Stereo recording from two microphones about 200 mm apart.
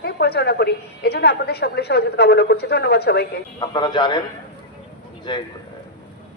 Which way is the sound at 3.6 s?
20° left (ahead or behind).